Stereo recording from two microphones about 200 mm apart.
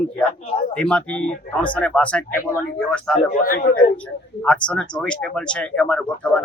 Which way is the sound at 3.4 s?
45° left (ahead or behind).